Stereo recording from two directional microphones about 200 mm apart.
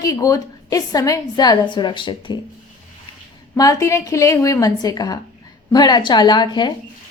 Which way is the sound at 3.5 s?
15° left (ahead or behind).